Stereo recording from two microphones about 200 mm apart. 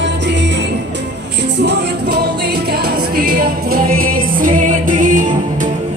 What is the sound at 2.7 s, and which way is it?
Music, 50° right (ahead or behind).